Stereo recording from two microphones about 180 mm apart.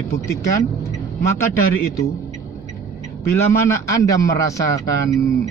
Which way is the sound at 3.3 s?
15° left (ahead or behind).